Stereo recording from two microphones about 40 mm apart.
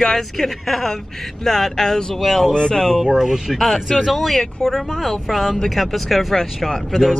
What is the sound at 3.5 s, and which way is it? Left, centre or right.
Speech, centre.